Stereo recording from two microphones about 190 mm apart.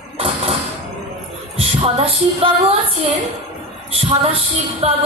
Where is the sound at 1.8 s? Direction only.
30° right (ahead or behind).